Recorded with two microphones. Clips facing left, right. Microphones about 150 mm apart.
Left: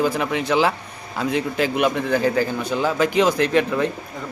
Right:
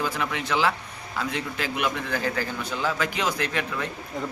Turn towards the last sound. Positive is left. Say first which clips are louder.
# left 10 dB
turn(degrees=25)  # may be behind; listen again after turning